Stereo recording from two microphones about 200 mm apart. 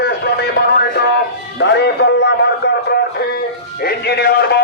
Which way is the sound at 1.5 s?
60° left (ahead or behind).